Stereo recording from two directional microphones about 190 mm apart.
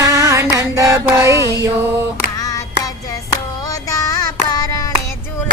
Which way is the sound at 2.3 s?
20° left (ahead or behind).